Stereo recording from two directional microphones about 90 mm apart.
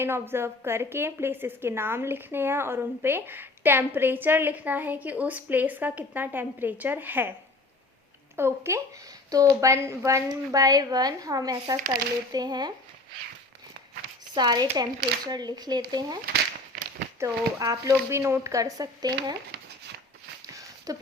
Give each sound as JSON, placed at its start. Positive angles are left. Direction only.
{"t": 0.0, "sound": "a woman's voice", "side_deg": -25}
{"t": 8.4, "sound": "a woman's voice", "side_deg": -30}
{"t": 14.3, "sound": "speech", "side_deg": -50}
{"t": 17.2, "sound": "speech", "side_deg": -40}
{"t": 18.1, "sound": "speech", "side_deg": -30}
{"t": 20.9, "sound": "speech", "side_deg": -40}